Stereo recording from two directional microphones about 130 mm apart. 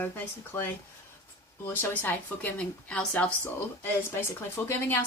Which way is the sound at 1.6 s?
15° left (ahead or behind).